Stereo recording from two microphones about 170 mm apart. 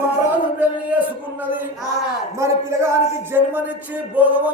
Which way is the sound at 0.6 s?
10° right (ahead or behind).